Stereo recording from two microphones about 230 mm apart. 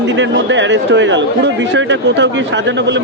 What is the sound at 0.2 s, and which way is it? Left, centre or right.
Speech, right.